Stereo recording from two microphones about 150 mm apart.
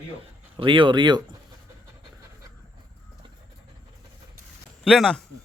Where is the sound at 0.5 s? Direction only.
35° right (ahead or behind).